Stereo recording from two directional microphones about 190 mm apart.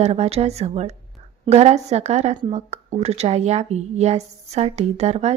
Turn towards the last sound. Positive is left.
turn(degrees=-35)  # may be behind; listen again after turning